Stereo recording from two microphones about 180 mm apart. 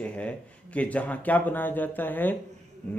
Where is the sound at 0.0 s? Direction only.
5° left (ahead or behind).